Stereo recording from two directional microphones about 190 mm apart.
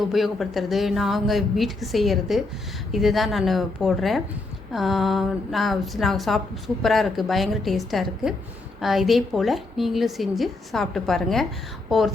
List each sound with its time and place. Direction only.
0.1 s a woman's voice: centre (ahead or behind)